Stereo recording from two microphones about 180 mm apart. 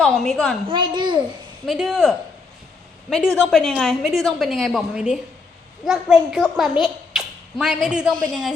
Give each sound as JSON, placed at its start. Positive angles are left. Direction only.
{"t": 0.0, "sound": "a woman's voice", "side_deg": 0}
{"t": 0.7, "sound": "a child's voice", "side_deg": -25}
{"t": 1.6, "sound": "a woman's voice", "side_deg": 0}